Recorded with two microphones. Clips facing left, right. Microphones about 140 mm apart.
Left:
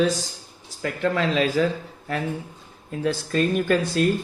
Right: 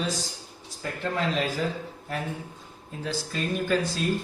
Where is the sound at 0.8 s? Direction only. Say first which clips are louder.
Left 6 dB; 90° left.